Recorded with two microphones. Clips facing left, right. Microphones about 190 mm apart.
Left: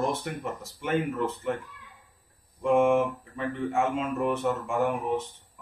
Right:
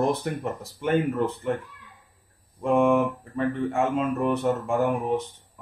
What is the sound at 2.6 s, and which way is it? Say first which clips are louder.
Speech: right 1 dB; 35° right (ahead or behind).